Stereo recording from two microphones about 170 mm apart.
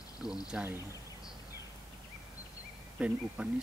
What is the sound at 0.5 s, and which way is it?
Speech, 5° right (ahead or behind).